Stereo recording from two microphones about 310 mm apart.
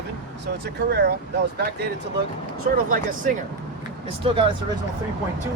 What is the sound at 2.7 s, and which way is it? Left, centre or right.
Speech, right.